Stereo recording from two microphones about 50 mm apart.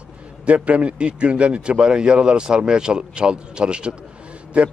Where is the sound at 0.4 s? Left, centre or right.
Right.